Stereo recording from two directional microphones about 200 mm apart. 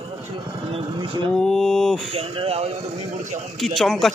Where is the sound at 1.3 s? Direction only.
Centre (ahead or behind).